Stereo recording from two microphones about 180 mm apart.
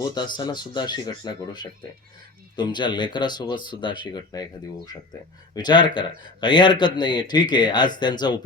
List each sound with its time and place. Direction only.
0.1 s speech: 25° left (ahead or behind)
5.5 s speech: 25° left (ahead or behind)